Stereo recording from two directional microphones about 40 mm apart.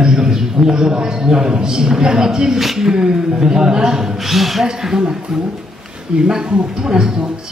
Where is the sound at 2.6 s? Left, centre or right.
Centre.